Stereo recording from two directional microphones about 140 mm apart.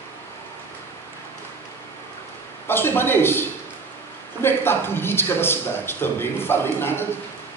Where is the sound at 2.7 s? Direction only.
15° left (ahead or behind).